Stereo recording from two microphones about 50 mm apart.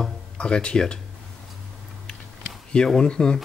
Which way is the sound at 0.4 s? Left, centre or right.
Centre.